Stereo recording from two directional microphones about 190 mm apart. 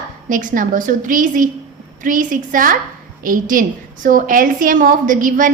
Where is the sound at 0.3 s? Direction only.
45° right (ahead or behind).